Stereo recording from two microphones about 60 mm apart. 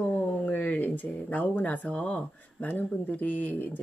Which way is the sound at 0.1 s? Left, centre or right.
Left.